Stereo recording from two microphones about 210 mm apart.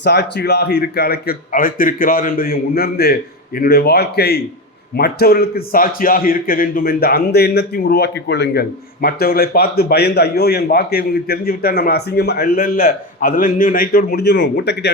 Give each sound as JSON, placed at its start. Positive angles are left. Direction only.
{"t": 0.0, "sound": "a man's voice", "side_deg": 55}